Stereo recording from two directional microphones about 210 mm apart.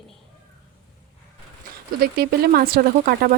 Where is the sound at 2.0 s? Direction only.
45° right (ahead or behind).